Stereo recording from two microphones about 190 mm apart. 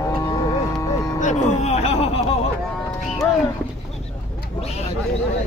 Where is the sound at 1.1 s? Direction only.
40° left (ahead or behind).